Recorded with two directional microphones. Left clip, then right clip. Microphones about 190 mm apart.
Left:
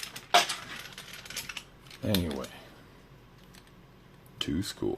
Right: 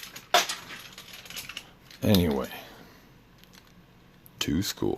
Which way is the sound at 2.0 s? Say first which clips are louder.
Right 7 dB; 35° right (ahead or behind).